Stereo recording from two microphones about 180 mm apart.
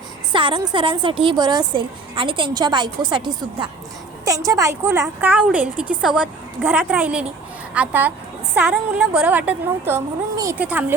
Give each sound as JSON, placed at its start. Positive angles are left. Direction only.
{"t": 0.3, "sound": "a woman's voice", "side_deg": -25}